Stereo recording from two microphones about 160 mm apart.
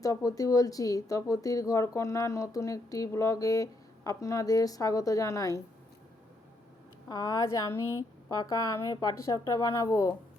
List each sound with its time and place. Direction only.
0.0 s speech: 20° left (ahead or behind)
7.1 s speech: 25° left (ahead or behind)